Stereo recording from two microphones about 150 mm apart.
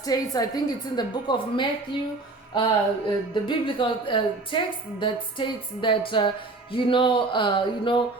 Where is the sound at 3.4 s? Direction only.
35° left (ahead or behind).